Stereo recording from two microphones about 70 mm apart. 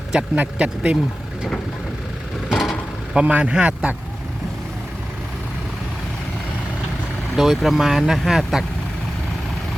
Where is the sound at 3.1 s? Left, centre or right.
Right.